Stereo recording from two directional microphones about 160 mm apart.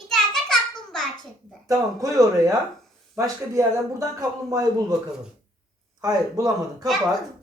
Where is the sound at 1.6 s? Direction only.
20° right (ahead or behind).